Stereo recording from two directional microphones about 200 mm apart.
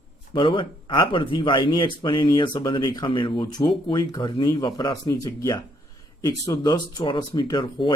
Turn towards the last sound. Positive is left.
turn(degrees=25)  # may be behind; listen again after turning